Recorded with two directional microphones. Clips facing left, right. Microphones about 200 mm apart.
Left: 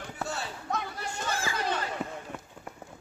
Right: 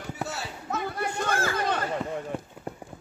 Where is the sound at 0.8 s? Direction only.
60° right (ahead or behind).